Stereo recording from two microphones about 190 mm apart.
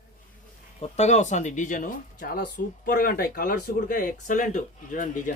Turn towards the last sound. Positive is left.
turn(degrees=45)  # may be behind; listen again after turning